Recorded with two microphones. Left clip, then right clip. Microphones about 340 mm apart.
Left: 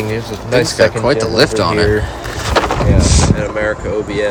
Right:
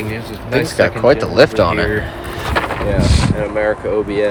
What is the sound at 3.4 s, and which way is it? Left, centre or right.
Speech, centre.